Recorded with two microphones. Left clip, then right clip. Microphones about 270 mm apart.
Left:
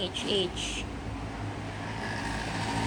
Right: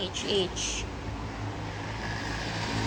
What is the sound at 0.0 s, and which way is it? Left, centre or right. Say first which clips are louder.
Speech: right 1 dB; centre.